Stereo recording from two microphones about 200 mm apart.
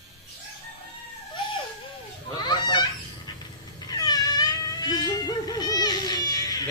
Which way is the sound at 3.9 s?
20° left (ahead or behind).